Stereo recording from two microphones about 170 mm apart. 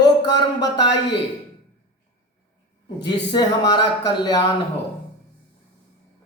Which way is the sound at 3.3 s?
25° left (ahead or behind).